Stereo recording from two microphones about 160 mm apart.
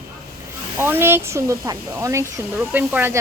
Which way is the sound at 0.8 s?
15° right (ahead or behind).